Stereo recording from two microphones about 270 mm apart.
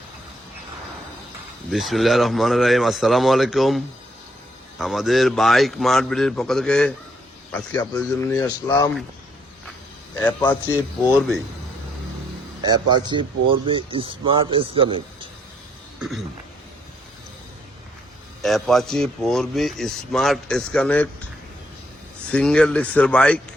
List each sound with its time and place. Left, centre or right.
1.7 s a man's voice: centre
10.2 s a man's voice: centre
12.9 s speech: centre
16.0 s throat clearing: centre
18.4 s speech: centre
22.3 s speech: centre